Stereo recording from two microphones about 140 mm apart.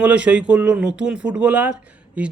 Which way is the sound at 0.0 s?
10° right (ahead or behind).